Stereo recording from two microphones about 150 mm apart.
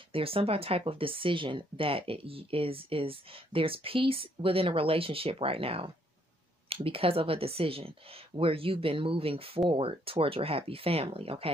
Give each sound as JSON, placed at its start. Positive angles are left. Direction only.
{"t": 0.1, "sound": "speech", "side_deg": -40}